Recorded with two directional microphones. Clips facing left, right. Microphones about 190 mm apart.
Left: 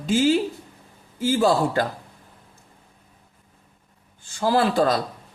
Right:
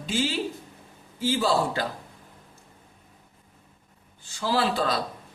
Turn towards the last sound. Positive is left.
turn(degrees=50)  # may be behind; listen again after turning